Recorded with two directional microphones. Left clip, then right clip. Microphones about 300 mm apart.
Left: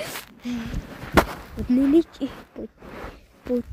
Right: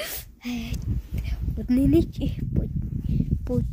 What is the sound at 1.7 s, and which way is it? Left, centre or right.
Speech, centre.